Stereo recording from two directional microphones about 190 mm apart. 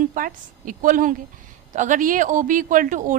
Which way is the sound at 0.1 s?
45° right (ahead or behind).